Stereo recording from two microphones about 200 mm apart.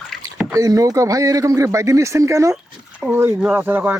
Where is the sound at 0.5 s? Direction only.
15° right (ahead or behind).